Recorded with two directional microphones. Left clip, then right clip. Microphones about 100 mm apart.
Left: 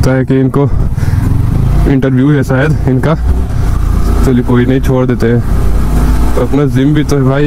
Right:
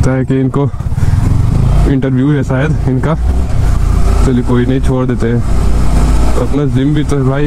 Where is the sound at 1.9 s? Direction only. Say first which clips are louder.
Left 3 dB; 25° left (ahead or behind).